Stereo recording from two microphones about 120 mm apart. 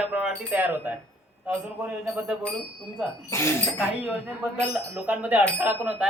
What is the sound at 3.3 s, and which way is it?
Speech, 25° left (ahead or behind).